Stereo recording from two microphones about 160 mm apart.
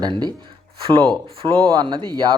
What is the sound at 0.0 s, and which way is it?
Speech, 25° right (ahead or behind).